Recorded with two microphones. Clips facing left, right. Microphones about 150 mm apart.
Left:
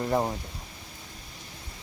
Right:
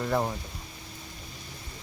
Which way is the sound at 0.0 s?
15° left (ahead or behind).